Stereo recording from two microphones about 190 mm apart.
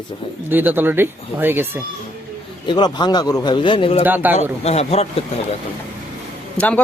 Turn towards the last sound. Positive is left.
turn(degrees=10)  # may be behind; listen again after turning